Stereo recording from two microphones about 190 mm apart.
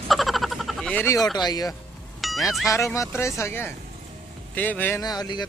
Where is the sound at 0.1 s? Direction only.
Centre (ahead or behind); by 1.8 s 20° left (ahead or behind).